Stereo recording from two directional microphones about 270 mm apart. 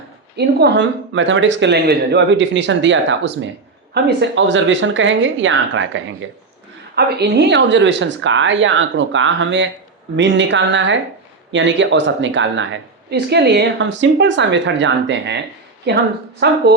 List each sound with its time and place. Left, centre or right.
0.3 s a woman's voice: right